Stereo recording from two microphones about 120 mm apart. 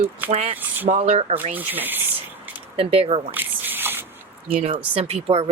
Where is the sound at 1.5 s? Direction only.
15° right (ahead or behind).